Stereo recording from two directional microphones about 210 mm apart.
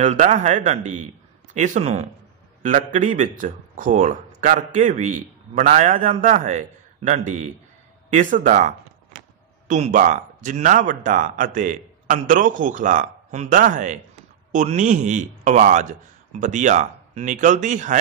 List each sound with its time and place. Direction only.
0.0 s speech: 35° right (ahead or behind)